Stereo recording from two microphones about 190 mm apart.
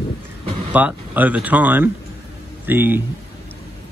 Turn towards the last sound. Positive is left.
turn(degrees=-10)  # may be behind; listen again after turning